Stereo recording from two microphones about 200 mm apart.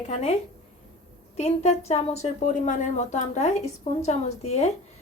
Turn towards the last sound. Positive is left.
turn(degrees=35)  # may be behind; listen again after turning